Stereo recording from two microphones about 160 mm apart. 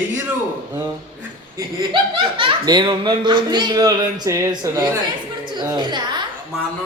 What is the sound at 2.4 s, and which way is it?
A woman's voice, 30° right (ahead or behind).